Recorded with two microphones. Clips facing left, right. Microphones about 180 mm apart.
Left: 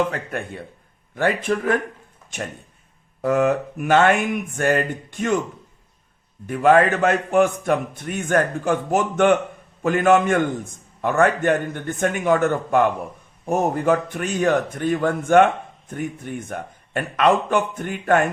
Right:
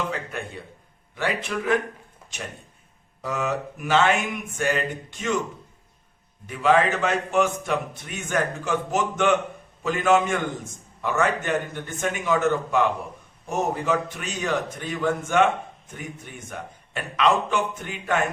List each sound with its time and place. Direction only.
0.1 s a man's voice: 55° left (ahead or behind)
3.2 s speech: 55° left (ahead or behind)
6.5 s a man's voice: 50° left (ahead or behind)